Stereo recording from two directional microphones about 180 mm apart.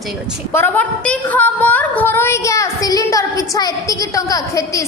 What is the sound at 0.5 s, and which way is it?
A woman's voice, 10° left (ahead or behind).